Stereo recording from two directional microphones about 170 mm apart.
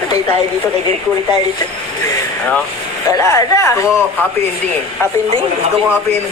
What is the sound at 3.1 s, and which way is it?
Speech, 20° left (ahead or behind).